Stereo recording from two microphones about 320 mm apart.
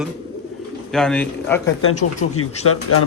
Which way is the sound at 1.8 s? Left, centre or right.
Left.